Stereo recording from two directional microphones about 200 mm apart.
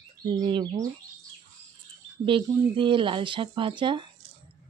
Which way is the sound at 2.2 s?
25° right (ahead or behind).